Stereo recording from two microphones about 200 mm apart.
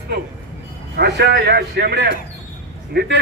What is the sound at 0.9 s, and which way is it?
A man's voice, 55° right (ahead or behind).